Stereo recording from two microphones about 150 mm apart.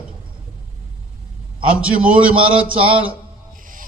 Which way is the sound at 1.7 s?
10° right (ahead or behind).